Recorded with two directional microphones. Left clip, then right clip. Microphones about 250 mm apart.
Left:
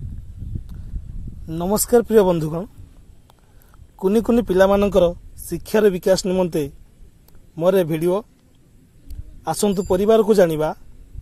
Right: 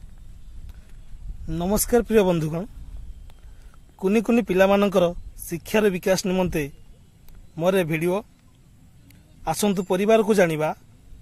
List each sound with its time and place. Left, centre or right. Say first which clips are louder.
1.4 s speech: left 3 dB; centre
4.4 s speech: left 3 dB; centre
4.6 s speech: left 3 dB; centre
9.6 s speech: left 5 dB; centre